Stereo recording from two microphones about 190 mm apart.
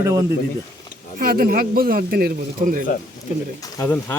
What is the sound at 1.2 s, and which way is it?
Speech, 50° right (ahead or behind).